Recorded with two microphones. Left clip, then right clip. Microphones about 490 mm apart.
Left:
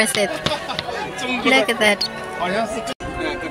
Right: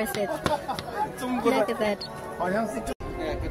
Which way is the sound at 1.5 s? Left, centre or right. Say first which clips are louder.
Left 9 dB; right.